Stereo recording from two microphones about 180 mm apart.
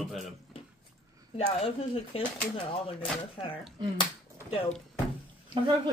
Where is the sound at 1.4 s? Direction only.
30° left (ahead or behind).